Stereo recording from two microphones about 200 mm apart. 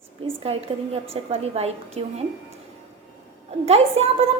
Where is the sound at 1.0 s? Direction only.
30° right (ahead or behind).